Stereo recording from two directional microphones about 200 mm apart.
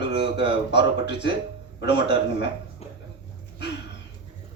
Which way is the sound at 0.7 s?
60° left (ahead or behind).